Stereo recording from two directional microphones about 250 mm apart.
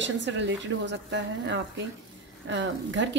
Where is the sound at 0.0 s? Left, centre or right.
Right.